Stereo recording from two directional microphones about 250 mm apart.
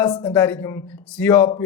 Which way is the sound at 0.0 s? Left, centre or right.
Centre.